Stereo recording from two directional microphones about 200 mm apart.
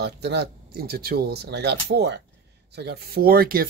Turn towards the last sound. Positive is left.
turn(degrees=-45)  # may be behind; listen again after turning